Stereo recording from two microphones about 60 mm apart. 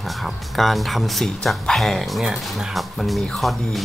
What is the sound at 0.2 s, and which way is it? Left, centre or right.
Speech, centre.